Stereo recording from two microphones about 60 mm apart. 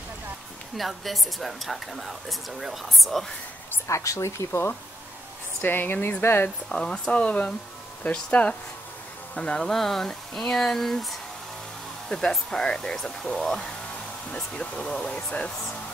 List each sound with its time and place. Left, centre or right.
0.7 s a woman's voice: centre
3.7 s a woman's voice: left
4.5 s speech: left
6.7 s speech: centre
14.3 s speech: centre